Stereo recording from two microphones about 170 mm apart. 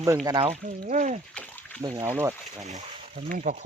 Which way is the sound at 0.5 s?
45° right (ahead or behind).